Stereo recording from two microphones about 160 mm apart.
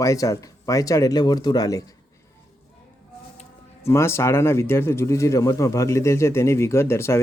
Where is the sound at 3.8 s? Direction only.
15° left (ahead or behind).